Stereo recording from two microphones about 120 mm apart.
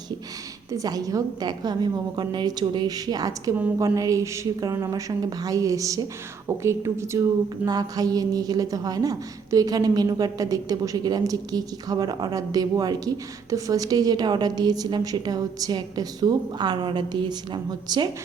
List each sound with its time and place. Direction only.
0.7 s a woman's voice: 30° right (ahead or behind)